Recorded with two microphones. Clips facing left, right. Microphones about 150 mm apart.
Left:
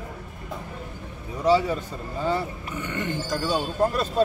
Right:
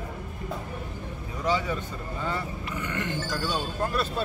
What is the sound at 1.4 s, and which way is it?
Speech, 30° left (ahead or behind).